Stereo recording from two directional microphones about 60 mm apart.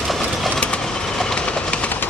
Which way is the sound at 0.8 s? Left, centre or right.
Centre.